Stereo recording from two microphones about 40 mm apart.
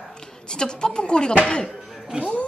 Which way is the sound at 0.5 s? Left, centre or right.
Left.